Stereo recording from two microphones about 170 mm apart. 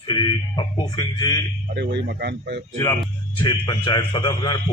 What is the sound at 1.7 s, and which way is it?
Speech, 75° right (ahead or behind).